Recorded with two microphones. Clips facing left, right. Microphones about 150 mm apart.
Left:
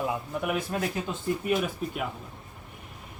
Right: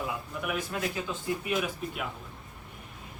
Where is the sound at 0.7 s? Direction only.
35° left (ahead or behind).